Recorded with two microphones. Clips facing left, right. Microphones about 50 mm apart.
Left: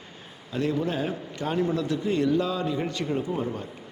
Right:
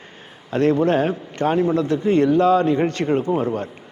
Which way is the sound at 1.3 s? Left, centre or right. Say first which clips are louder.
Right 8 dB; right.